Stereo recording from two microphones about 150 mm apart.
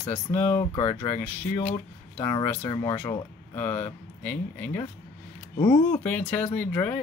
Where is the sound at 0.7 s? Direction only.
40° left (ahead or behind).